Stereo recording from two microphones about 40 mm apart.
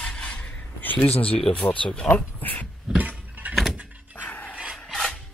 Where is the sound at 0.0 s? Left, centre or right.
Left.